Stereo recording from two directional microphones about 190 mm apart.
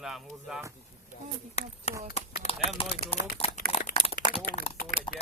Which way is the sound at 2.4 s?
35° left (ahead or behind).